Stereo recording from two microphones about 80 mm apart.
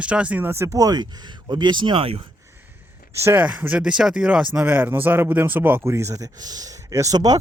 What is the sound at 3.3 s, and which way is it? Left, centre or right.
Speech, centre.